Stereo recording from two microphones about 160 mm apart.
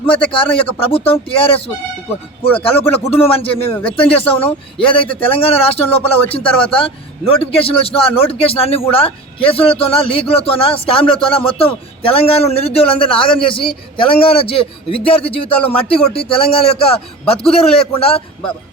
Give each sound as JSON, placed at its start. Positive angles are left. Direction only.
{"t": 0.0, "sound": "speech", "side_deg": 35}
{"t": 3.1, "sound": "speech", "side_deg": 35}